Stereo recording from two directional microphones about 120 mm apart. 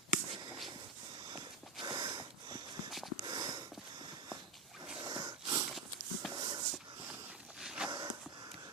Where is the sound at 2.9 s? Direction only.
Centre (ahead or behind).